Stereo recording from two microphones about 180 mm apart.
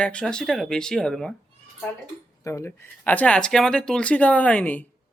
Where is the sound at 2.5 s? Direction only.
15° left (ahead or behind).